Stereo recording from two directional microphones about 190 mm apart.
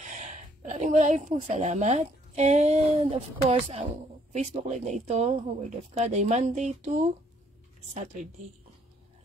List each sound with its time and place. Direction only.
0.0 s speech: 40° right (ahead or behind)